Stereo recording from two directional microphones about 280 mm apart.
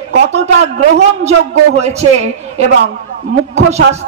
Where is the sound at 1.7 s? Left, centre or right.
Right.